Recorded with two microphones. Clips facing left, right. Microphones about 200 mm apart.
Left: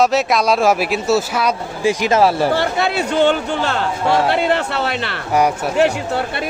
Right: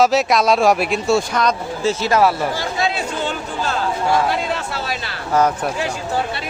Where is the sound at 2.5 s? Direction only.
65° left (ahead or behind).